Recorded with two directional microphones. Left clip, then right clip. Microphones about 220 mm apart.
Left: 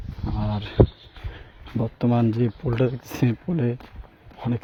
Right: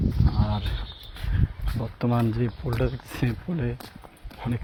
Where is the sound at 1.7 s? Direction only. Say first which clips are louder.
Left 4 dB; 35° left (ahead or behind).